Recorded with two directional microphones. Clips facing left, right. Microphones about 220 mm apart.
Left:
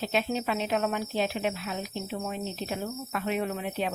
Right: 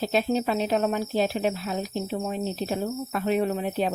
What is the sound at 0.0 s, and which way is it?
Speech, 40° right (ahead or behind).